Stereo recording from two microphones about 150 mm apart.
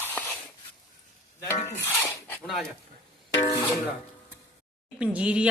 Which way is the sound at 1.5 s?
50° left (ahead or behind).